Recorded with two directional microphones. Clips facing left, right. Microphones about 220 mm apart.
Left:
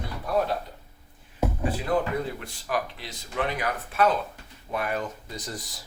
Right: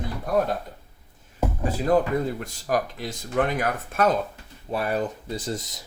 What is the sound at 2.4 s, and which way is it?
Speech, 40° right (ahead or behind).